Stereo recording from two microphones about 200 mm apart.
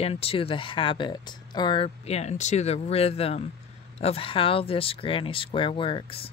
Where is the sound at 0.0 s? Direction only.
30° left (ahead or behind).